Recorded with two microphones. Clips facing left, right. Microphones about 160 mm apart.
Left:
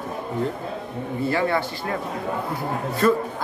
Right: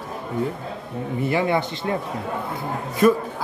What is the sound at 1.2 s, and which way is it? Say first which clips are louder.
Speech: right 1 dB; 20° right (ahead or behind).